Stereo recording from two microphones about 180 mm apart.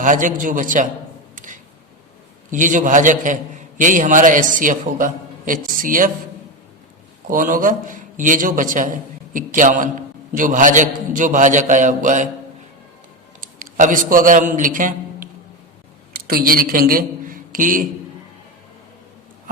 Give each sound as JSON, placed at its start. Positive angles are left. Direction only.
{"t": 0.0, "sound": "a man's voice", "side_deg": -45}
{"t": 2.5, "sound": "a man's voice", "side_deg": -45}
{"t": 7.3, "sound": "a man's voice", "side_deg": -50}
{"t": 13.4, "sound": "a man's voice", "side_deg": -45}